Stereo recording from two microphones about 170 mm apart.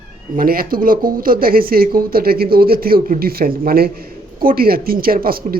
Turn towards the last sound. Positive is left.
turn(degrees=-60)  # may be behind; listen again after turning